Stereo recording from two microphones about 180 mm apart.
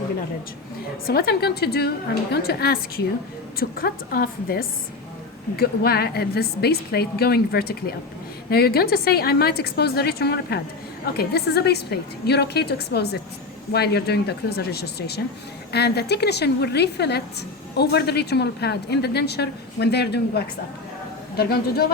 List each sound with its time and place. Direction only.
1.0 s a woman's voice: 60° left (ahead or behind)